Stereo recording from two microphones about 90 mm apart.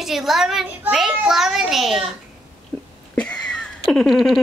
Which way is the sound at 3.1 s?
10° left (ahead or behind).